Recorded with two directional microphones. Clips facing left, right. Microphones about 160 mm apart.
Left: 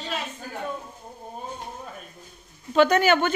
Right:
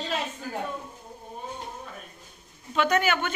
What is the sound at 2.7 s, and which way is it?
Speech, 35° left (ahead or behind).